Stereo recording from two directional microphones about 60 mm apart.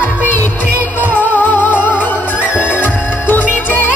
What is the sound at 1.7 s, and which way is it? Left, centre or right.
Music, centre.